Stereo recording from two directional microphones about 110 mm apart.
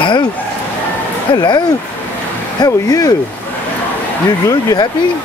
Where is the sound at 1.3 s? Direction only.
45° left (ahead or behind).